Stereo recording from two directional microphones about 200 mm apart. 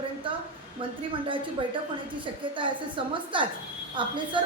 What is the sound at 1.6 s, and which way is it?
A man's voice, 25° right (ahead or behind).